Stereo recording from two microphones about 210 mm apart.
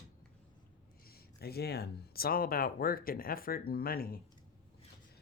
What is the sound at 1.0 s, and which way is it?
Speech, 50° left (ahead or behind).